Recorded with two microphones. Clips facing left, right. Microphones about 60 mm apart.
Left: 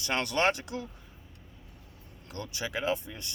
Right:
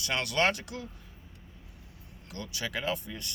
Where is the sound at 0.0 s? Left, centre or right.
Left.